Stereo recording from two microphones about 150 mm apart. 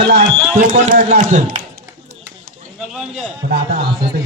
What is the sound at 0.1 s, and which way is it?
Speech, 85° right.